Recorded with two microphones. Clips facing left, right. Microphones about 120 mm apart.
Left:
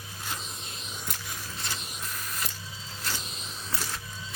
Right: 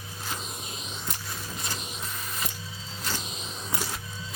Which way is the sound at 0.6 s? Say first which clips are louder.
Right 2 dB; centre (ahead or behind).